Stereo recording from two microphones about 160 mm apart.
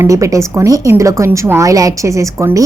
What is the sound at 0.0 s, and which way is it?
A woman's voice, 20° right (ahead or behind).